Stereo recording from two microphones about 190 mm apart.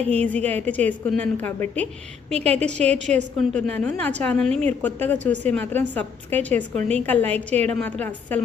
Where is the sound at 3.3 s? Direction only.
5° left (ahead or behind).